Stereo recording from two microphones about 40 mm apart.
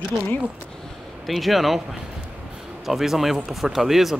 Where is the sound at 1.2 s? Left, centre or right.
Centre.